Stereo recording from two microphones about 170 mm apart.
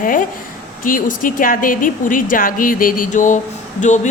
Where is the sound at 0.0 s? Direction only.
55° left (ahead or behind).